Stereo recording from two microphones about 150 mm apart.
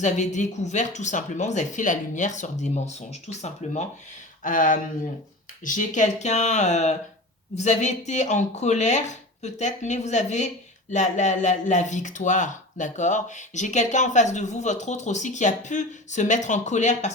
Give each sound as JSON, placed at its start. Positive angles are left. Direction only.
{"t": 0.0, "sound": "speech", "side_deg": 50}
{"t": 4.4, "sound": "speech", "side_deg": 65}